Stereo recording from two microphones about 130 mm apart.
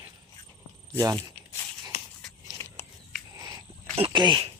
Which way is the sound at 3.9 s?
40° right (ahead or behind).